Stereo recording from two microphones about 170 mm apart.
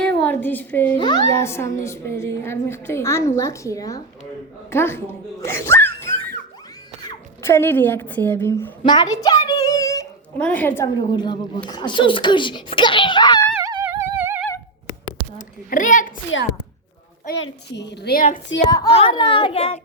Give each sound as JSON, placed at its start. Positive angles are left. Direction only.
{"t": 0.0, "sound": "a woman's voice", "side_deg": 10}
{"t": 0.9, "sound": "a child's voice", "side_deg": 25}
{"t": 1.3, "sound": "a woman's voice", "side_deg": 15}
{"t": 8.8, "sound": "a sound", "side_deg": 25}
{"t": 10.3, "sound": "a woman's voice", "side_deg": 10}
{"t": 10.9, "sound": "a child's voice", "side_deg": 25}
{"t": 13.6, "sound": "music", "side_deg": -15}
{"t": 15.4, "sound": "a child's voice", "side_deg": 50}
{"t": 17.2, "sound": "a woman's voice", "side_deg": 90}
{"t": 18.9, "sound": "a child's voice", "side_deg": 35}